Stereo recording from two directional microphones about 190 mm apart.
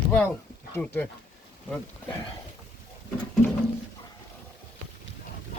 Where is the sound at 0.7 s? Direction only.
10° left (ahead or behind).